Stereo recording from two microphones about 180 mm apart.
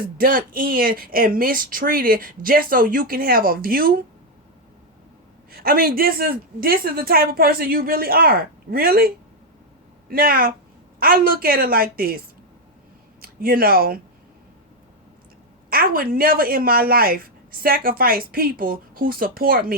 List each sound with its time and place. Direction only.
0.2 s speech: 50° right (ahead or behind)
5.5 s a woman's voice: 55° right (ahead or behind)
13.2 s speech: 55° right (ahead or behind)
15.7 s speech: 55° right (ahead or behind)